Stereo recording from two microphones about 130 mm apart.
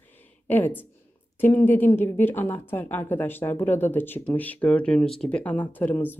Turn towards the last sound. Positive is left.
turn(degrees=15)  # may be behind; listen again after turning